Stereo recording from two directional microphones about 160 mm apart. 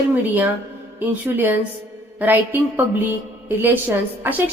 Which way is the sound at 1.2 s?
10° right (ahead or behind).